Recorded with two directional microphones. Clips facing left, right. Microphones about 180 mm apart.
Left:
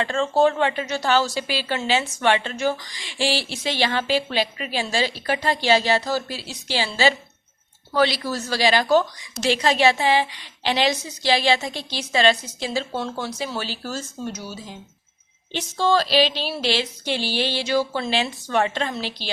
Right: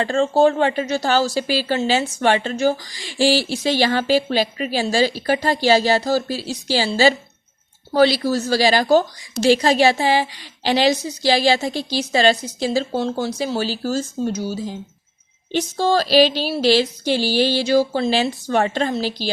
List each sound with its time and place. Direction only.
0.0 s speech: 35° right (ahead or behind)